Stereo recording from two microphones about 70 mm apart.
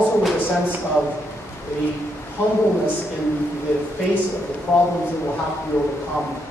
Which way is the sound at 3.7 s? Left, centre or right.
Left.